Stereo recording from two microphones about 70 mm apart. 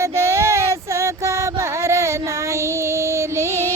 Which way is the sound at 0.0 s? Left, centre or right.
Right.